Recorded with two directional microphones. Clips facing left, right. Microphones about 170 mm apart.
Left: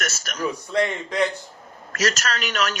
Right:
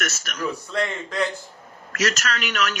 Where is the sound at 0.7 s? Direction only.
20° left (ahead or behind).